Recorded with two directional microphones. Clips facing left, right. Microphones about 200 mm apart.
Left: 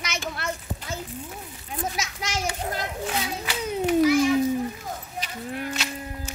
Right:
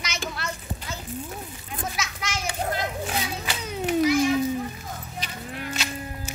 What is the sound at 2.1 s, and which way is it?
Children playing, 40° left (ahead or behind).